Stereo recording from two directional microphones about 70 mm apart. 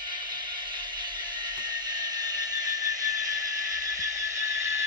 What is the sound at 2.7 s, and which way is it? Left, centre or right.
Vehicle, right.